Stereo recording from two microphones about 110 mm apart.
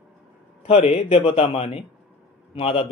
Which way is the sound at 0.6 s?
65° left (ahead or behind).